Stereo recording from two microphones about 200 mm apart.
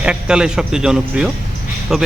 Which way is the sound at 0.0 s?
5° right (ahead or behind).